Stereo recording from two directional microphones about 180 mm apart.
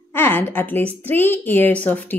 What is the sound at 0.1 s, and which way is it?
A woman's voice, 10° left (ahead or behind).